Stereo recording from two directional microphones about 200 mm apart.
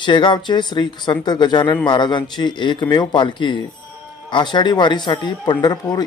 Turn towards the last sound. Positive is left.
turn(degrees=20)  # may be behind; listen again after turning